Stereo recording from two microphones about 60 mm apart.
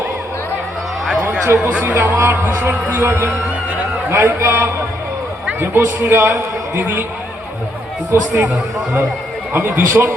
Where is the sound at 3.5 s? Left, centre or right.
Right.